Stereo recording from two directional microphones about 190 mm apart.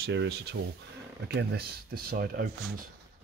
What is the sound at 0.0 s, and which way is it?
Speech, 65° right (ahead or behind).